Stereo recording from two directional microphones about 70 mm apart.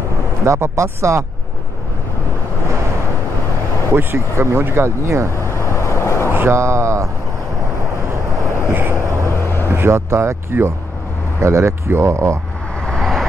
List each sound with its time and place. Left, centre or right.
0.5 s speech: right
3.9 s speech: right
5.3 s vehicle: left
6.3 s speech: right
8.7 s vehicle: right
9.3 s vehicle: left
9.8 s speech: right
12.8 s vehicle: centre